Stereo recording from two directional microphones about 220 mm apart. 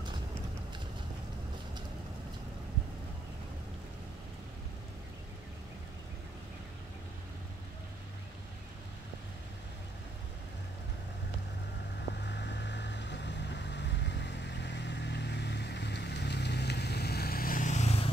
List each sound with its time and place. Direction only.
12.3 s vehicle: 50° left (ahead or behind); by 18.1 s 30° left (ahead or behind)